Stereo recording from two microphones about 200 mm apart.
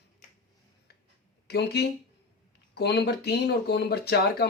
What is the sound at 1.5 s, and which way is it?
Speech, 55° left (ahead or behind).